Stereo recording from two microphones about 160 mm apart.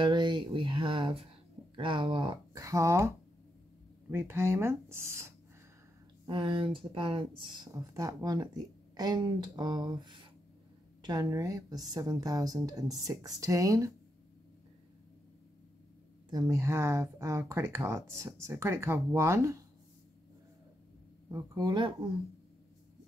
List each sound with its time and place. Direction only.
0.0 s speech: 30° right (ahead or behind)
2.5 s speech: 20° right (ahead or behind)
4.1 s speech: 15° right (ahead or behind)
6.2 s speech: 30° right (ahead or behind)
16.3 s speech: 20° right (ahead or behind)
21.3 s speech: 20° right (ahead or behind)